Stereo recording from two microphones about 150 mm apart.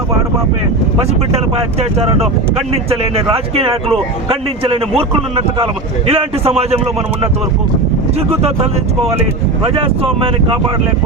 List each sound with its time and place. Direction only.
2.6 s speech: 45° right (ahead or behind)
6.1 s speech: 40° right (ahead or behind)
9.7 s speech: 40° right (ahead or behind)